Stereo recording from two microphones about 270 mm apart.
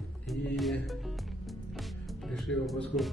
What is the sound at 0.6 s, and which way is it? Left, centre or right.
Music, centre.